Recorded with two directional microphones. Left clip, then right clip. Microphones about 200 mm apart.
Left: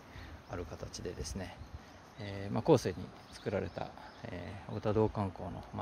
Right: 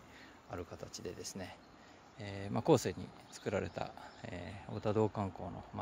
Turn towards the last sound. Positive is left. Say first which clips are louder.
# left 2 dB
turn(degrees=-15)  # may be behind; listen again after turning